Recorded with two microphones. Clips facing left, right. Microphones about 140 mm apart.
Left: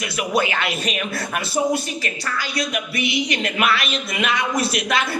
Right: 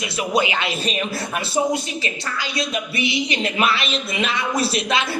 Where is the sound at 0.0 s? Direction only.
25° right (ahead or behind).